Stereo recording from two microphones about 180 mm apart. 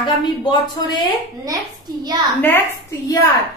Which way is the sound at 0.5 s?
25° left (ahead or behind).